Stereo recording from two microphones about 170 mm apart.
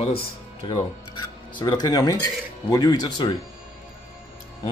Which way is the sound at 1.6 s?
25° left (ahead or behind).